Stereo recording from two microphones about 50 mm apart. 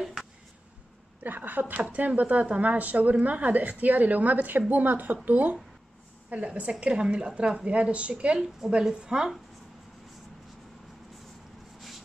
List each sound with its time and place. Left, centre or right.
1.2 s a woman's voice: right
8.5 s a woman's voice: centre